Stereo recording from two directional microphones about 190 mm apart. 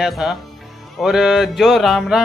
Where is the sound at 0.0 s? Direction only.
Centre (ahead or behind).